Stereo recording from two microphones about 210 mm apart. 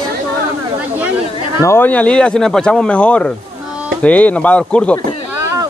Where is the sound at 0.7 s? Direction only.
5° right (ahead or behind).